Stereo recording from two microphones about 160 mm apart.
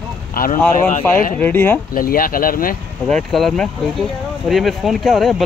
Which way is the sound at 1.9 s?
65° left (ahead or behind).